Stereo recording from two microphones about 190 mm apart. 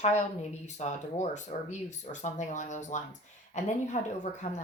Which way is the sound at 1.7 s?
40° left (ahead or behind).